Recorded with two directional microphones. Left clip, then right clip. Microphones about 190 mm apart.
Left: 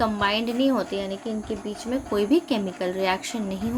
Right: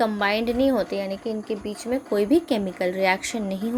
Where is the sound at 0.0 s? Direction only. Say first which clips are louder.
Right 1 dB; 30° right (ahead or behind).